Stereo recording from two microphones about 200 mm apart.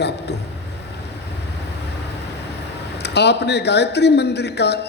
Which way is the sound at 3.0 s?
55° left (ahead or behind).